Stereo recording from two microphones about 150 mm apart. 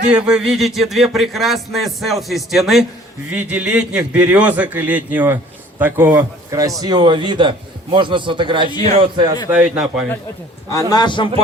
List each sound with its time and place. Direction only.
0.3 s a man's voice: 5° right (ahead or behind); by 9.3 s 35° right (ahead or behind)
9.5 s a man's voice: 10° right (ahead or behind)
10.7 s a man's voice: 25° left (ahead or behind)